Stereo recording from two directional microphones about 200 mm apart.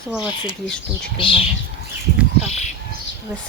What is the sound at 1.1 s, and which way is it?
Speech, 25° left (ahead or behind).